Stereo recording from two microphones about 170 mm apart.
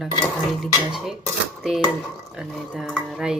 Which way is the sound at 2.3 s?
5° right (ahead or behind).